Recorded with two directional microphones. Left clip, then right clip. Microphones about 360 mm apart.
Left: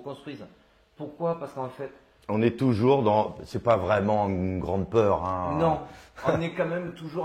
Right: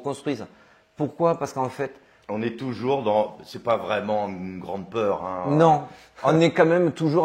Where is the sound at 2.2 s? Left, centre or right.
Centre.